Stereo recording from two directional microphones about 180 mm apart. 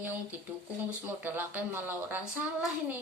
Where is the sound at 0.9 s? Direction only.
10° right (ahead or behind).